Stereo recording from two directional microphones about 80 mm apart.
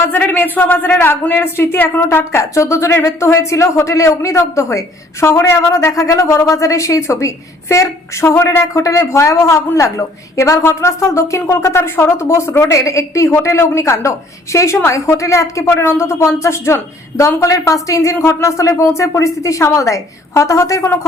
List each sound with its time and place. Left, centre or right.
0.1 s a woman's voice: left